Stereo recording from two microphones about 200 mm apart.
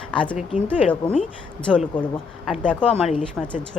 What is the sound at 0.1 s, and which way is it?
A woman's voice, 5° left (ahead or behind).